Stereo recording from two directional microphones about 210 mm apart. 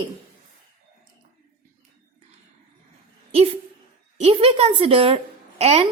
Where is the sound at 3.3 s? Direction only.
25° right (ahead or behind).